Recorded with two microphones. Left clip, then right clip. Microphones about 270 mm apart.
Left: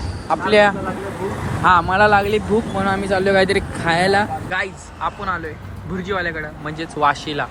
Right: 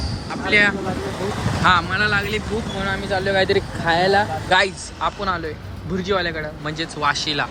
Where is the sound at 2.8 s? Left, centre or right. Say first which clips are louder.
Even; centre.